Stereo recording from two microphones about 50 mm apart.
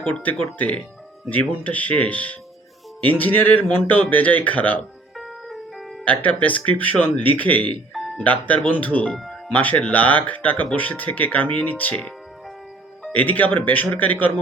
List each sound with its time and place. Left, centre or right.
0.0 s speech: left
5.1 s music: centre
6.1 s speech: left
7.9 s doorbell: centre
8.2 s speech: left
9.0 s speech: centre
9.5 s speech: left
13.1 s speech: left